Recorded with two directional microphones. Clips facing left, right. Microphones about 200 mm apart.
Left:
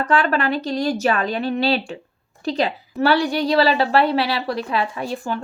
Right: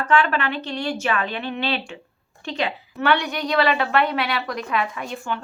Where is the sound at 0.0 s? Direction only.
40° left (ahead or behind).